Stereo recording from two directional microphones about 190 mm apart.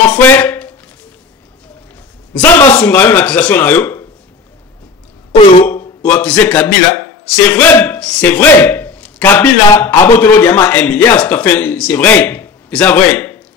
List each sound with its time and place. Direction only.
0.1 s a sound: 10° left (ahead or behind)
2.3 s speech: 10° left (ahead or behind)
5.7 s a man's voice: 10° left (ahead or behind)